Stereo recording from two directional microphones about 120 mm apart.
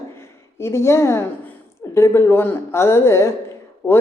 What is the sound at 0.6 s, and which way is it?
Speech, 20° left (ahead or behind).